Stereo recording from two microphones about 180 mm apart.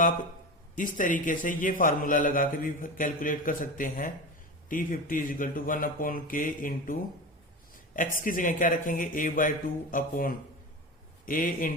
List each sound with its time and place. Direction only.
0.8 s a man's voice: 45° left (ahead or behind)
7.9 s a man's voice: 50° left (ahead or behind)